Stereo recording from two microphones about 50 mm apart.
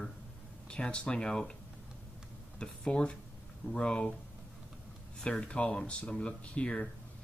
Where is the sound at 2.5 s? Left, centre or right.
Centre.